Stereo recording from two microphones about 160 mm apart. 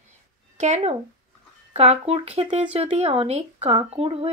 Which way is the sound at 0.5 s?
50° right (ahead or behind).